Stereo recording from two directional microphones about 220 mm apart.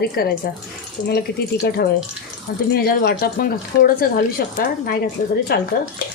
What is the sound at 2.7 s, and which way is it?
Speech, 45° left (ahead or behind).